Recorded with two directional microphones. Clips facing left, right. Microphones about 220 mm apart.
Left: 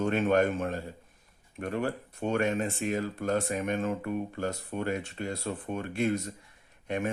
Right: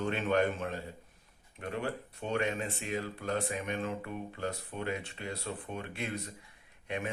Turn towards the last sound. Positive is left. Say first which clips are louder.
# left 6 dB
turn(degrees=45)  # may be behind; listen again after turning